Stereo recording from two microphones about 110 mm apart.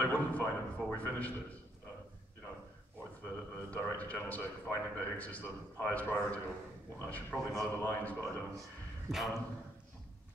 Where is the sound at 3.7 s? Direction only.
15° left (ahead or behind).